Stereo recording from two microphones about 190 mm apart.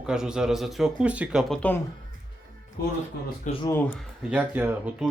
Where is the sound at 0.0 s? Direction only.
5° right (ahead or behind).